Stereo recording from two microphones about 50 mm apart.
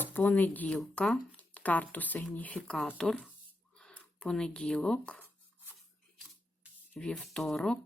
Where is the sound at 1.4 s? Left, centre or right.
Left.